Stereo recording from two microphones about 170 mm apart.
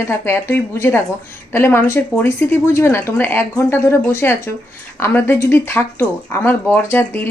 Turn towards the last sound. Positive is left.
turn(degrees=10)  # may be behind; listen again after turning